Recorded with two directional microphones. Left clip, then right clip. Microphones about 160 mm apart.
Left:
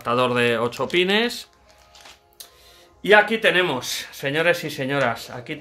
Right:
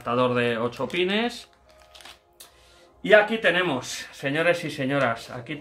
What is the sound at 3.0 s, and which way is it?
Speech, 55° left (ahead or behind).